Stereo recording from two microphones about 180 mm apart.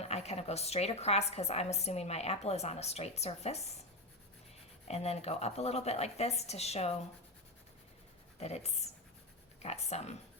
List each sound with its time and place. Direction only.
0.0 s a woman's voice: 35° left (ahead or behind)
4.9 s a woman's voice: 35° left (ahead or behind)
8.4 s a woman's voice: 35° left (ahead or behind)